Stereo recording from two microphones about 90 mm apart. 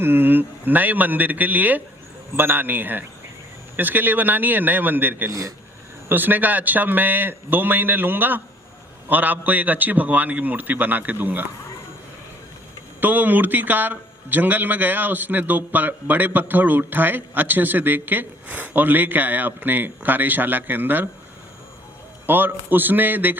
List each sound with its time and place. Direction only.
0.0 s a man's voice: 25° right (ahead or behind)
5.3 s speech: 40° right (ahead or behind)
6.1 s a man's voice: 20° right (ahead or behind)
13.0 s a man's voice: 20° right (ahead or behind)
22.3 s a man's voice: 20° right (ahead or behind)